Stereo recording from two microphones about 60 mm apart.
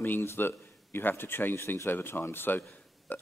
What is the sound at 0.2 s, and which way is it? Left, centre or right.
A man's voice, left.